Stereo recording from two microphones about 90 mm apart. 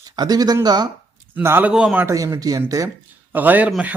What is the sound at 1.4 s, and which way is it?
Speech, 25° right (ahead or behind).